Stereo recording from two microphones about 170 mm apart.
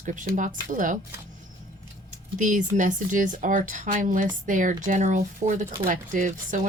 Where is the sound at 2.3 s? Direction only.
50° right (ahead or behind).